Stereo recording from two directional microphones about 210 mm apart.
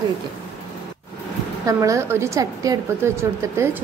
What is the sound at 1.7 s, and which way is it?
A woman's voice, 15° right (ahead or behind).